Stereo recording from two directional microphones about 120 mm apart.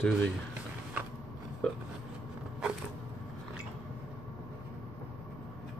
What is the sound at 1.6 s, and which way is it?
Speech, 10° left (ahead or behind).